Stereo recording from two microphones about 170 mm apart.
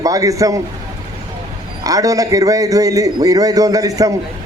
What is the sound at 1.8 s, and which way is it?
A man's voice, 20° right (ahead or behind).